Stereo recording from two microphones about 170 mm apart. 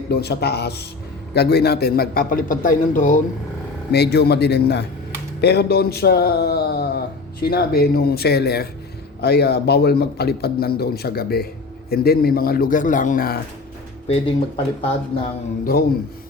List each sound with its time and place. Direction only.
0.1 s a man's voice: 75° left (ahead or behind); by 3.2 s 50° left (ahead or behind)
3.9 s a man's voice: 75° left (ahead or behind)
5.4 s a sound: 75° left (ahead or behind)
7.4 s a man's voice: 65° left (ahead or behind)
14.1 s speech: 30° left (ahead or behind)